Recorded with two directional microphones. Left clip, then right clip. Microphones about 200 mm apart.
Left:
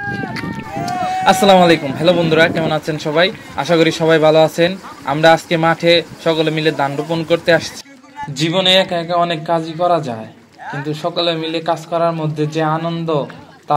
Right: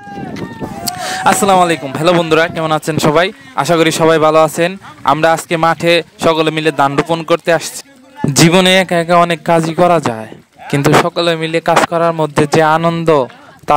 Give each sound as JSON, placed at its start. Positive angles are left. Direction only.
{"t": 0.8, "sound": "speech", "side_deg": -55}